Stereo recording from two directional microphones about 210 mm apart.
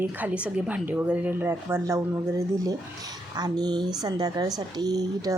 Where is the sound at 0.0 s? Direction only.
10° right (ahead or behind).